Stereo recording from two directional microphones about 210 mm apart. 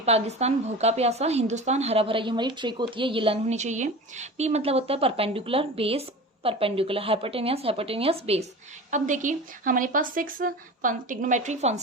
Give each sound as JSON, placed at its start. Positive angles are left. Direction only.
{"t": 0.0, "sound": "a woman's voice", "side_deg": -30}